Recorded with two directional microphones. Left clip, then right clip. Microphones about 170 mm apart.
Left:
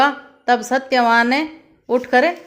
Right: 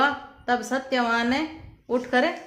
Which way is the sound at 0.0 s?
35° left (ahead or behind).